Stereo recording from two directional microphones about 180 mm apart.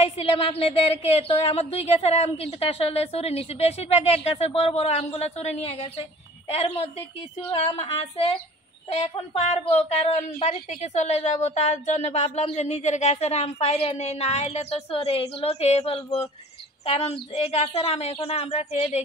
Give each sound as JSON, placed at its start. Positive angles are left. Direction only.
{"t": 0.0, "sound": "speech", "side_deg": 30}